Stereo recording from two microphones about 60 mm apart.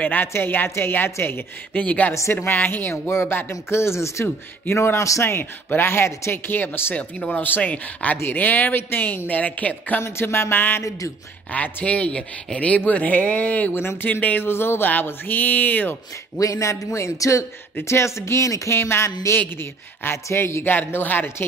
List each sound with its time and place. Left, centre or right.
0.0 s speech: left
1.7 s speech: left
5.2 s speech: left
7.0 s speech: left
9.3 s speech: left
10.0 s speech: left
11.5 s speech: left
13.7 s speech: left
16.3 s a man's voice: left
19.6 s speech: left
20.7 s speech: left